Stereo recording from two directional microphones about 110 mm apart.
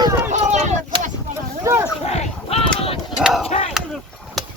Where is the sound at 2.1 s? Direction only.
65° left (ahead or behind).